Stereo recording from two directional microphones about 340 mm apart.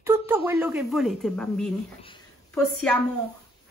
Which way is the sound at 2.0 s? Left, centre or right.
Centre.